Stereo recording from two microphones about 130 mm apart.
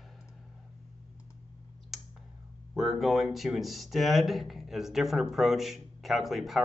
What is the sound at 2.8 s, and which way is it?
Speech, centre (ahead or behind).